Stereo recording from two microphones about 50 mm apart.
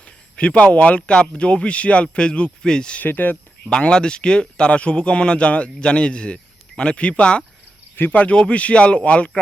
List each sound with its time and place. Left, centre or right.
0.3 s speech: left
3.0 s speech: left
3.7 s speech: centre